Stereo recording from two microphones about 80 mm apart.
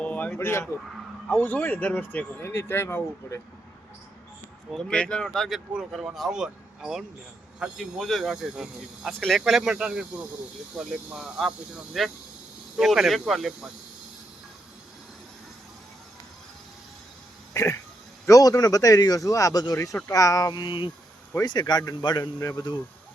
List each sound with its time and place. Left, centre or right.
0.0 s a sound: centre
0.3 s speech: left
2.4 s speech: left
4.9 s speech: centre
17.5 s a sound: left
18.3 s speech: left
21.4 s speech: left